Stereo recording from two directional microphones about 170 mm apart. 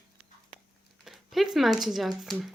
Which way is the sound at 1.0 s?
Centre (ahead or behind).